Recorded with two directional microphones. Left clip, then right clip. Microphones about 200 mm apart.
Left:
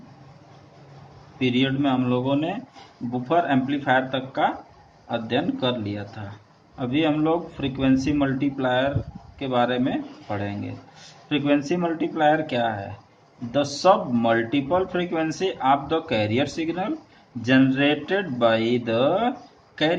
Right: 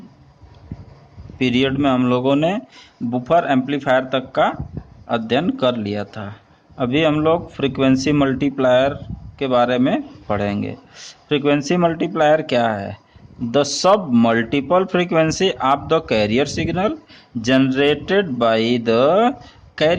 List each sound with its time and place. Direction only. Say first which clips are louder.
1.4 s speech: right 5 dB; 50° right (ahead or behind)